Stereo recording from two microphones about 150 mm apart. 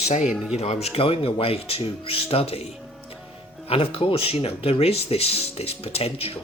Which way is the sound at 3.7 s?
40° left (ahead or behind).